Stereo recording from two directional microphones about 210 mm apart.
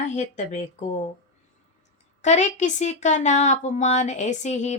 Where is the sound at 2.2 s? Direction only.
35° left (ahead or behind).